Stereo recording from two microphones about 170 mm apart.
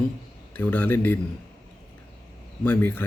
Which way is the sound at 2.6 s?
10° left (ahead or behind).